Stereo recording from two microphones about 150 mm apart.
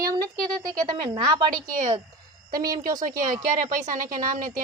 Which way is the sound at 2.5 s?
70° right (ahead or behind).